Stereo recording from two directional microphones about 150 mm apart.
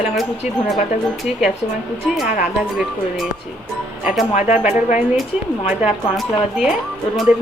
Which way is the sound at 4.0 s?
5° right (ahead or behind).